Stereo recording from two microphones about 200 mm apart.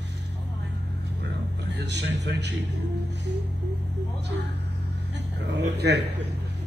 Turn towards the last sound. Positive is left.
turn(degrees=-60)  # may be behind; listen again after turning